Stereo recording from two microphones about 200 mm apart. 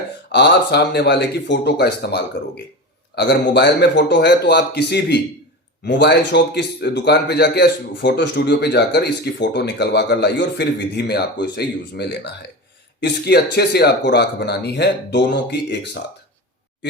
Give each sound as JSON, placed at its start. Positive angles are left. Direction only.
{"t": 0.3, "sound": "speech", "side_deg": 60}